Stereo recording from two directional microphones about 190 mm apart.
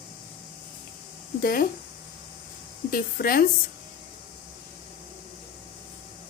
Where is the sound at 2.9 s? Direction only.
50° left (ahead or behind).